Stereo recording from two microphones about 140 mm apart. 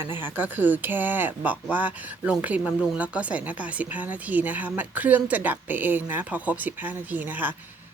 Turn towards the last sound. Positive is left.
turn(degrees=-15)  # may be behind; listen again after turning